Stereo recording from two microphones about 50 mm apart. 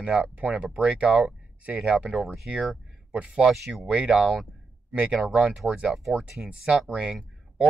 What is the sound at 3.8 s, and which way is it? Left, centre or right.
Speech, centre.